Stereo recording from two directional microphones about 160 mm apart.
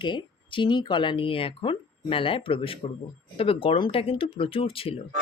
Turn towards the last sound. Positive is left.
turn(degrees=35)  # may be behind; listen again after turning